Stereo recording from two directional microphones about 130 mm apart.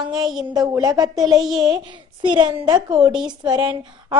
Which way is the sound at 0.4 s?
30° right (ahead or behind).